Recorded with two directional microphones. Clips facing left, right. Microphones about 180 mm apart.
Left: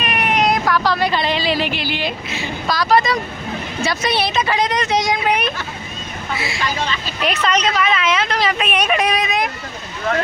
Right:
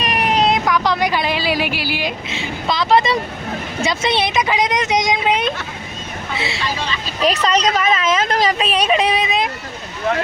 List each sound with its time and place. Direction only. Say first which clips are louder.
0.0 s vehicle: right 1 dB; 35° right (ahead or behind)
0.7 s speech: even; 15° right (ahead or behind)
2.3 s speech: even; 25° right (ahead or behind)
7.2 s speech: right 3 dB; 35° right (ahead or behind)
8.5 s speech: right 2 dB; 30° right (ahead or behind)